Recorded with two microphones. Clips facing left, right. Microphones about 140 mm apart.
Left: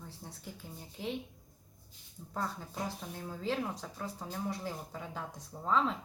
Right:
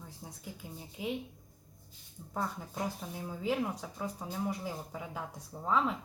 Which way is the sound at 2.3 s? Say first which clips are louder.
Right 1 dB; 10° right (ahead or behind).